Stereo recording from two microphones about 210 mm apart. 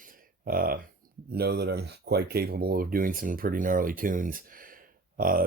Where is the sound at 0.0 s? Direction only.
45° right (ahead or behind).